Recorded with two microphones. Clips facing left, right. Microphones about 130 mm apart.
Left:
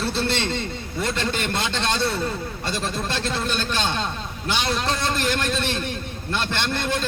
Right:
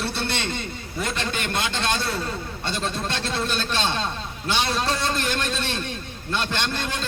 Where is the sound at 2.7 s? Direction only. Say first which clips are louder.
Even; 25° right (ahead or behind).